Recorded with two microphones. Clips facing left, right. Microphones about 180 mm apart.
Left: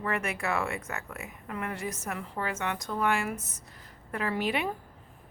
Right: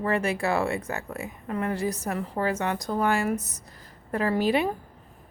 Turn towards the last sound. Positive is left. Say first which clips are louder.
# right 6 dB
turn(degrees=-35)  # may be behind; listen again after turning